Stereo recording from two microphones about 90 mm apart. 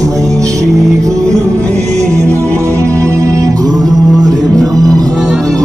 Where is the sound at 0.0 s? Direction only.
40° right (ahead or behind).